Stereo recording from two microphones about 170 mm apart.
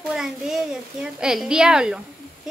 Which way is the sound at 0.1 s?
5° right (ahead or behind).